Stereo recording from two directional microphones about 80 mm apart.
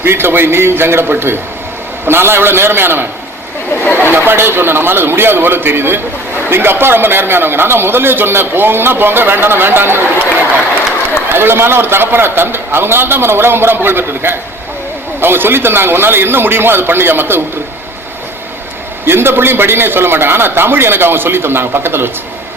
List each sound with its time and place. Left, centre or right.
0.0 s speech: right
4.1 s speech: right
11.3 s speech: right
19.0 s speech: right